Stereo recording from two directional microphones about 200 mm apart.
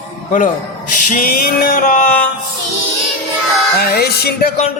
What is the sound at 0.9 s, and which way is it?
Music, 40° left (ahead or behind).